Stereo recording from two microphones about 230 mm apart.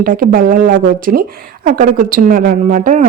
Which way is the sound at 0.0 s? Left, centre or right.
Right.